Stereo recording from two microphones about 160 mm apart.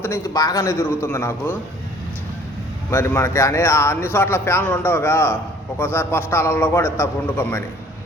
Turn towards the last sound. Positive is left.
turn(degrees=15)  # may be behind; listen again after turning